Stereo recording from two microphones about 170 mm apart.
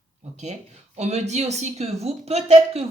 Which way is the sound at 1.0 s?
40° right (ahead or behind).